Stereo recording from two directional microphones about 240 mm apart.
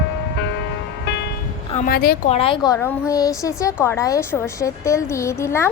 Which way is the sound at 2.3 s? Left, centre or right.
Left.